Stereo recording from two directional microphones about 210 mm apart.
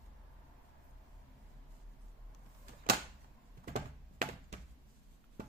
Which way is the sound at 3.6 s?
40° right (ahead or behind).